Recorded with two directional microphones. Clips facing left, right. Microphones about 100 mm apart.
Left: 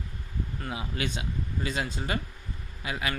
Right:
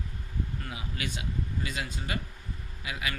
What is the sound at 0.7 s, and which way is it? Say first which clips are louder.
Speech: left 4 dB; 30° left (ahead or behind).